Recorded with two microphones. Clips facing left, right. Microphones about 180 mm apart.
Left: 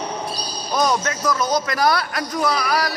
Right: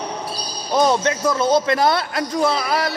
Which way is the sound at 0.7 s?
25° right (ahead or behind).